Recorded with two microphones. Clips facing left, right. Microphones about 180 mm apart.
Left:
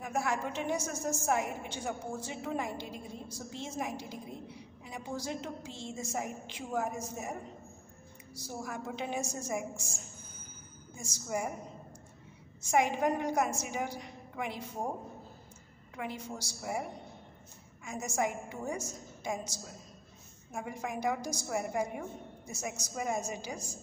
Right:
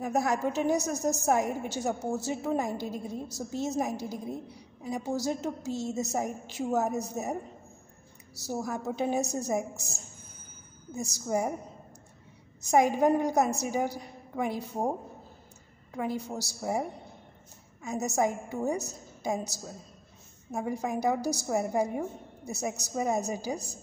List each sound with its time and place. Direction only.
0.0 s a woman's voice: 40° right (ahead or behind)
8.5 s a woman's voice: 40° right (ahead or behind)
12.6 s a woman's voice: 40° right (ahead or behind)
15.9 s a woman's voice: 35° right (ahead or behind)
17.8 s a woman's voice: 40° right (ahead or behind)
20.5 s a woman's voice: 35° right (ahead or behind)